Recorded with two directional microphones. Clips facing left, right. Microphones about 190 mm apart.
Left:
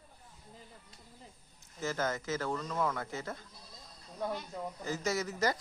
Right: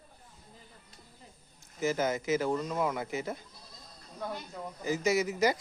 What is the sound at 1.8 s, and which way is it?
Speech, 15° right (ahead or behind).